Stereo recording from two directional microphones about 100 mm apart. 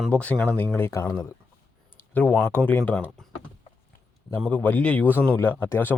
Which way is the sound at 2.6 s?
20° left (ahead or behind).